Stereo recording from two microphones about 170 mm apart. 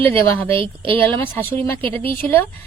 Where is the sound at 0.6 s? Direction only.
30° right (ahead or behind).